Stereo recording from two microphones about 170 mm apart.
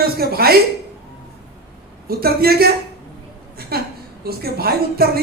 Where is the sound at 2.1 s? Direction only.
65° right (ahead or behind).